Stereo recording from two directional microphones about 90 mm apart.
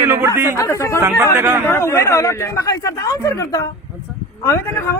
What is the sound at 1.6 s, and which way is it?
A man's voice, 30° left (ahead or behind).